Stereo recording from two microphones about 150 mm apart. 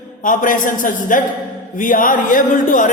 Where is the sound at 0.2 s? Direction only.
60° left (ahead or behind).